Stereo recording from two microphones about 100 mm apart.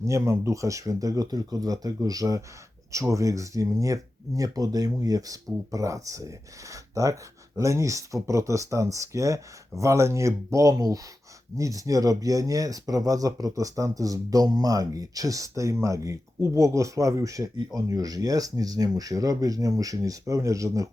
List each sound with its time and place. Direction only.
0.0 s speech: 30° right (ahead or behind)